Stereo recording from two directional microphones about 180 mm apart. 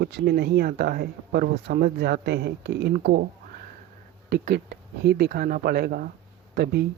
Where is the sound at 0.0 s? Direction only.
60° right (ahead or behind).